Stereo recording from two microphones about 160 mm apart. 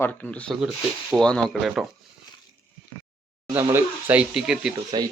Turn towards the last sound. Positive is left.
turn(degrees=-25)  # may be behind; listen again after turning